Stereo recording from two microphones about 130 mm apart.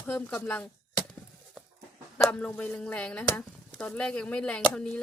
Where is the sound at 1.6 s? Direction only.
Centre (ahead or behind).